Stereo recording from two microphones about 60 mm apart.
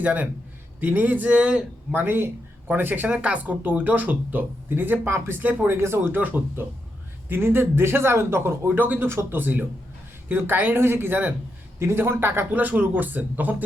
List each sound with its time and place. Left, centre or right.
0.0 s speech: right
2.0 s speech: right
3.1 s speech: right
5.4 s speech: right
5.7 s speech: right
6.0 s speech: right
9.0 s speech: right
11.8 s speech: right